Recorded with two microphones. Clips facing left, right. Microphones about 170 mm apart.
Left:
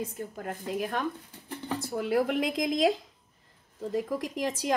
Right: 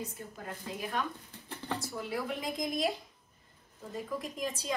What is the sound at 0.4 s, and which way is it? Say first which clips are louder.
A woman's voice: left 7 dB; 60° left (ahead or behind).